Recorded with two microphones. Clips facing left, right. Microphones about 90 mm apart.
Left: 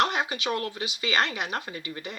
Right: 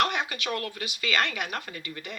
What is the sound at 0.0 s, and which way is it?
Speech, 25° left (ahead or behind).